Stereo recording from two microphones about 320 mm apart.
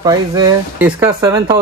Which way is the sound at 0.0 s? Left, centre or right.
Centre.